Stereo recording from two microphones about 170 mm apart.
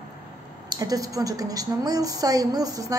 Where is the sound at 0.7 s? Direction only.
20° right (ahead or behind).